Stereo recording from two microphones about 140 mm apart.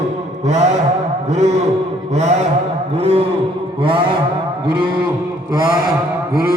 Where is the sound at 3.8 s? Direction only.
40° right (ahead or behind).